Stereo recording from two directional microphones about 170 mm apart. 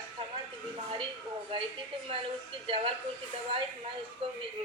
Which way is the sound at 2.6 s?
35° right (ahead or behind).